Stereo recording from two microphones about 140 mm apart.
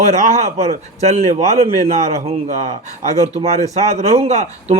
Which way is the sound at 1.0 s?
55° right (ahead or behind).